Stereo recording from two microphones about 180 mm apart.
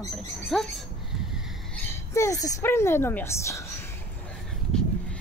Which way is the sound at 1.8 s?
15° left (ahead or behind).